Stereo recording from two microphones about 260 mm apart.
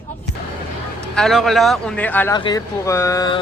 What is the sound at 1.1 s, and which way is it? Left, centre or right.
Speech, centre.